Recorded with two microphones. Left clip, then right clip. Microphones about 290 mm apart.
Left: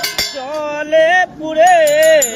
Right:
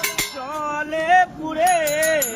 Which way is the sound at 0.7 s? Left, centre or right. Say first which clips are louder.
Left 12 dB; centre.